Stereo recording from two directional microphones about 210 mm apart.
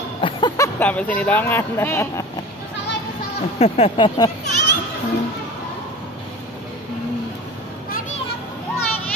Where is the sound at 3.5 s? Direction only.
30° left (ahead or behind).